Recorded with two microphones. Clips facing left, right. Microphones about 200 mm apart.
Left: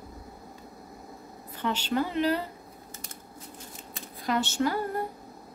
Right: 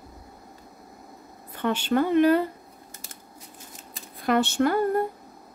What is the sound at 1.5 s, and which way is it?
Speech, 55° right (ahead or behind).